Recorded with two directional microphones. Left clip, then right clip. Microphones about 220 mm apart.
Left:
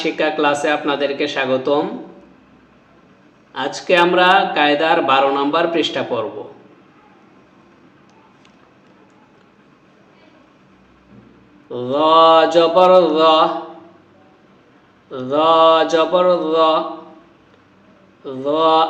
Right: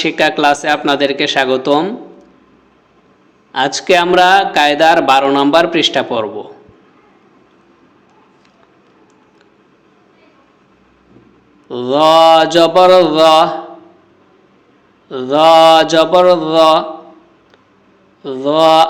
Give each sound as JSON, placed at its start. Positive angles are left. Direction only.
{"t": 0.0, "sound": "speech", "side_deg": -45}
{"t": 3.5, "sound": "speech", "side_deg": -45}
{"t": 11.7, "sound": "speech", "side_deg": -45}
{"t": 15.1, "sound": "speech", "side_deg": -45}
{"t": 18.2, "sound": "speech", "side_deg": -45}